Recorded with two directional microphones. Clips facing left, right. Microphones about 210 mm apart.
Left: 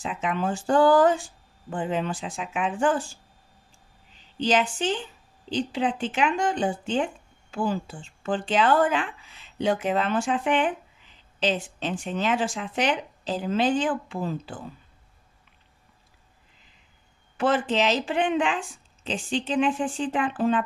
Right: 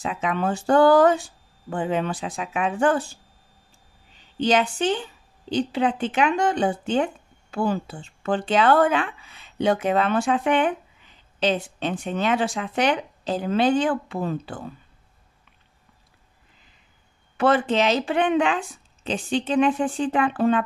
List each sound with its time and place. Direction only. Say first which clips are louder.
0.0 s speech: right 3 dB; 60° right (ahead or behind)
5.6 s speech: right 3 dB; 65° right (ahead or behind)
17.4 s speech: right 3 dB; 65° right (ahead or behind)